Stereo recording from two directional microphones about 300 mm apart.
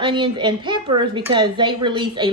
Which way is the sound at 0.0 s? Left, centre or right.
Centre.